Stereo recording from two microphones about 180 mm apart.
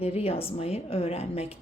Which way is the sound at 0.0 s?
35° left (ahead or behind).